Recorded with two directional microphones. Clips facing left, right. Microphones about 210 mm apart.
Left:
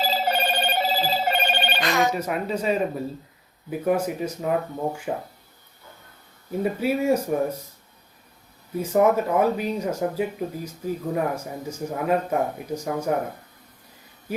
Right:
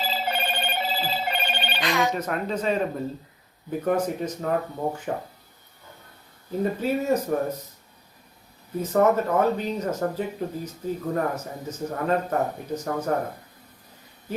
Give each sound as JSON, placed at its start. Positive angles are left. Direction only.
{"t": 0.0, "sound": "telephone bell ringing", "side_deg": 40}
{"t": 2.1, "sound": "speech", "side_deg": 10}
{"t": 6.6, "sound": "speech", "side_deg": 10}
{"t": 8.8, "sound": "speech", "side_deg": 10}